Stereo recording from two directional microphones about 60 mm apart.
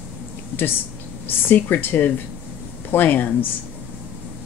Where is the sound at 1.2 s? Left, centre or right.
Left.